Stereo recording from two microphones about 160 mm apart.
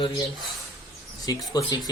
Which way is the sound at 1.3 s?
25° left (ahead or behind).